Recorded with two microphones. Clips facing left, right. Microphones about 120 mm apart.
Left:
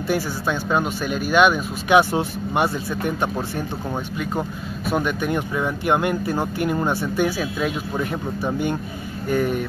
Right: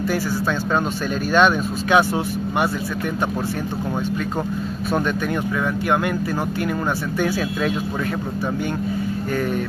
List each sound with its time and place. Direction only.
0.1 s speech: 15° left (ahead or behind)
4.9 s speech: 15° left (ahead or behind)